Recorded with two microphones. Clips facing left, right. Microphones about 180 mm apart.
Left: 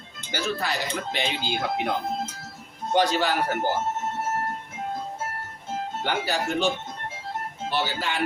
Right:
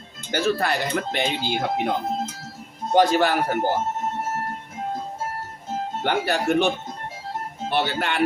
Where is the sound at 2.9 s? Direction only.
50° right (ahead or behind).